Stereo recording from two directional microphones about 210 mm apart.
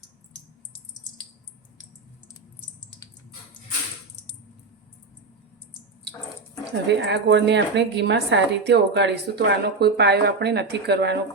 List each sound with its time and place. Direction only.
6.8 s a woman's voice: 55° right (ahead or behind)